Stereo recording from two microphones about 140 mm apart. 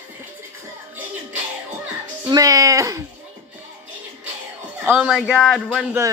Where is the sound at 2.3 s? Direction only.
25° right (ahead or behind).